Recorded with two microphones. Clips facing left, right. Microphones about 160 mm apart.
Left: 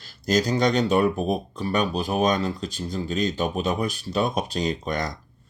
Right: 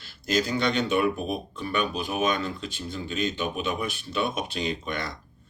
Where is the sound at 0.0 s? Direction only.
40° left (ahead or behind).